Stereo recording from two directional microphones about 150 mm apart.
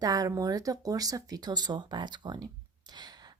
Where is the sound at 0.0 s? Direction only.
25° right (ahead or behind).